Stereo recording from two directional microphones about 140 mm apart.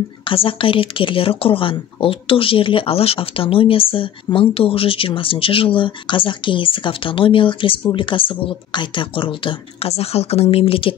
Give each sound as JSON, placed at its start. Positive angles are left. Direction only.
{"t": 0.2, "sound": "speech", "side_deg": 40}